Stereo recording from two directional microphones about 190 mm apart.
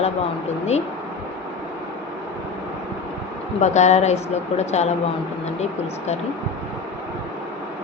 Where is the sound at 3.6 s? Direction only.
35° left (ahead or behind).